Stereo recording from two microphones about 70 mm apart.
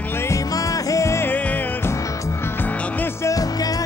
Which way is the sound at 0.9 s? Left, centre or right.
Left.